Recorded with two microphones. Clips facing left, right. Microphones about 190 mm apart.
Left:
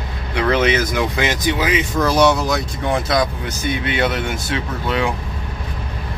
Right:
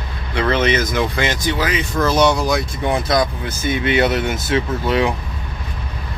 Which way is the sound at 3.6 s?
45° right (ahead or behind).